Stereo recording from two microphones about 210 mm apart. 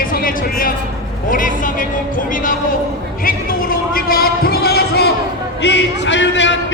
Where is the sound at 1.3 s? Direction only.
40° left (ahead or behind).